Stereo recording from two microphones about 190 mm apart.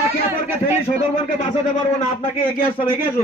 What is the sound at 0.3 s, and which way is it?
Speech, 10° right (ahead or behind).